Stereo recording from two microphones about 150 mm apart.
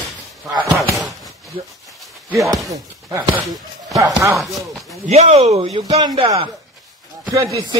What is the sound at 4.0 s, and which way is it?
Speech, 20° right (ahead or behind).